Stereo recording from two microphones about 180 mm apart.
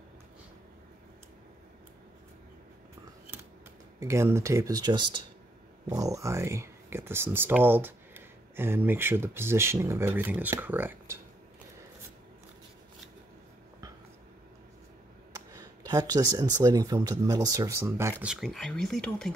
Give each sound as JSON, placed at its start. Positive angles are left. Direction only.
{"t": 4.0, "sound": "speech", "side_deg": -15}
{"t": 15.3, "sound": "speech", "side_deg": -20}
{"t": 18.2, "sound": "speech", "side_deg": 0}